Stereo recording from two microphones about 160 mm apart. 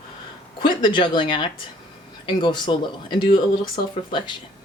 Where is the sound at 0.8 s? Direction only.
30° left (ahead or behind).